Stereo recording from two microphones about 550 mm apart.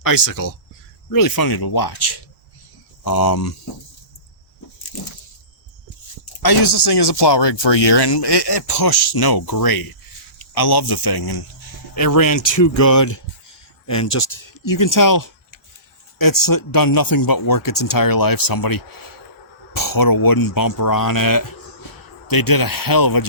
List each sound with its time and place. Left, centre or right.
0.0 s speech: left
6.4 s speech: left